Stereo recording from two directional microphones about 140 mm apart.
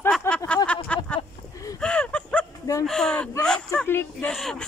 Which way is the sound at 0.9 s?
10° left (ahead or behind).